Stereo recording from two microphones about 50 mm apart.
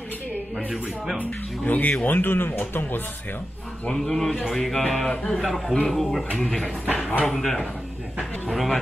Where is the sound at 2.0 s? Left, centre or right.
Left.